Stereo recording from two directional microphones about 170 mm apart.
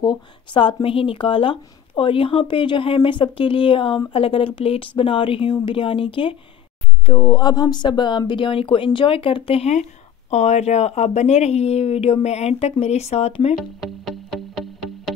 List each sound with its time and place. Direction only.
0.0 s speech: 30° left (ahead or behind)
13.6 s music: centre (ahead or behind)